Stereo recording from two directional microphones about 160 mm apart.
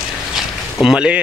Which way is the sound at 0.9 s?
5° right (ahead or behind).